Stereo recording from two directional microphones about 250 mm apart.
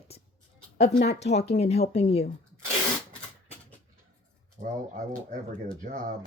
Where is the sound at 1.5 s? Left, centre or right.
Left.